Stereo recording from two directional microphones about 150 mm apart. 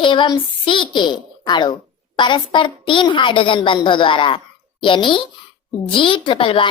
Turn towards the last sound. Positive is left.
turn(degrees=35)  # may be behind; listen again after turning